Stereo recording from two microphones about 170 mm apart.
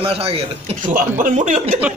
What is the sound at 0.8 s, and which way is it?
Speech, 50° right (ahead or behind).